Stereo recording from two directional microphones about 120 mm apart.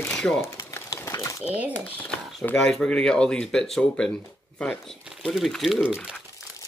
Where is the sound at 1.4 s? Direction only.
10° right (ahead or behind).